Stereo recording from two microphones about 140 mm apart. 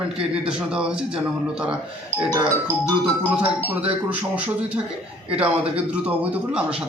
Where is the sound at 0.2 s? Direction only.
5° right (ahead or behind).